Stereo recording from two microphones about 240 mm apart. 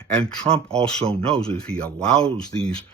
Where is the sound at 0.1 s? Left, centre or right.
Centre.